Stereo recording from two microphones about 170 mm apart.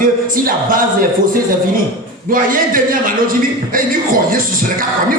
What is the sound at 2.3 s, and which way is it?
A man's voice, 55° right (ahead or behind).